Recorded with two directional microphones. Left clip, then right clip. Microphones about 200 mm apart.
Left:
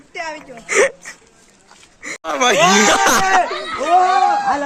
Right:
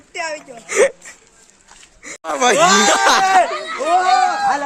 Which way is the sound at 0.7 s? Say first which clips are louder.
Even; 5° right (ahead or behind).